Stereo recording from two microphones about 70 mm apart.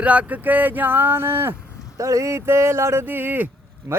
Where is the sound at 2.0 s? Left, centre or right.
Right.